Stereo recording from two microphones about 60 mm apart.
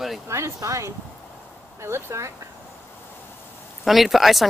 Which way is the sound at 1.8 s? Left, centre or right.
Right.